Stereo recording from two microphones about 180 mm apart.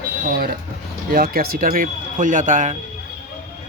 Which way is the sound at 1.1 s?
55° right (ahead or behind).